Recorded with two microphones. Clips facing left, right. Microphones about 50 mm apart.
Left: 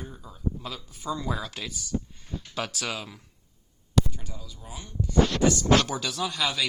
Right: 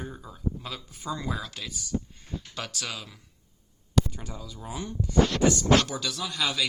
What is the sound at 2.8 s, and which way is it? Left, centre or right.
Speech, left.